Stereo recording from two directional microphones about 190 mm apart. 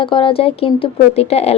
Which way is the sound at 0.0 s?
25° left (ahead or behind).